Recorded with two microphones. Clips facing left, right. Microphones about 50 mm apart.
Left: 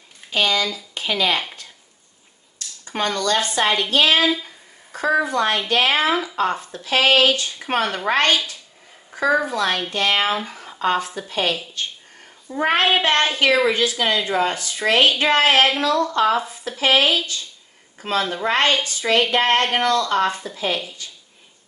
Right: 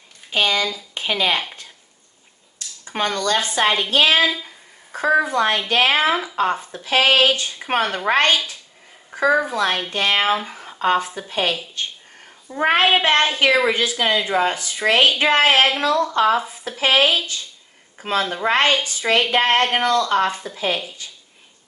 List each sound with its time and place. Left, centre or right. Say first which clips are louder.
0.3 s speech: even; right
2.8 s a woman's voice: even; right
12.4 s a woman's voice: right 2 dB; centre
20.5 s a woman's voice: right 1 dB; centre